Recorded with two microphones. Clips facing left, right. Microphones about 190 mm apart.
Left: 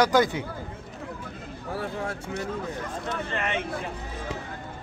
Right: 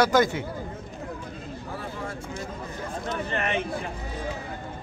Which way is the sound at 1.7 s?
70° left (ahead or behind).